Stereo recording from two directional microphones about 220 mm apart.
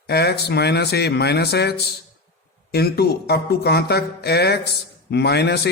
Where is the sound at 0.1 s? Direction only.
45° left (ahead or behind).